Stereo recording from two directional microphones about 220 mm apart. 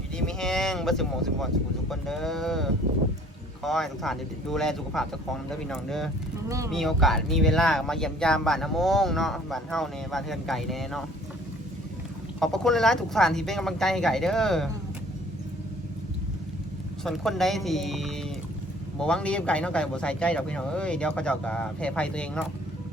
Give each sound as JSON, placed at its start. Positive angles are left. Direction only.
{"t": 0.2, "sound": "speech", "side_deg": 5}
{"t": 12.4, "sound": "speech", "side_deg": 0}
{"t": 17.0, "sound": "speech", "side_deg": 0}